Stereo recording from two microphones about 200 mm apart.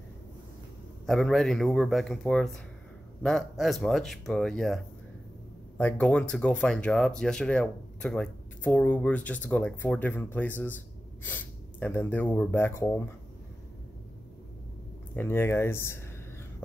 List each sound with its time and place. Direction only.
1.0 s speech: centre (ahead or behind)
5.8 s speech: 5° left (ahead or behind)
15.1 s speech: 10° left (ahead or behind)